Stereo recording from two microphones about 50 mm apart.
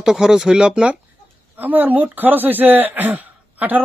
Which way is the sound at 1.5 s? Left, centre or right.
Right.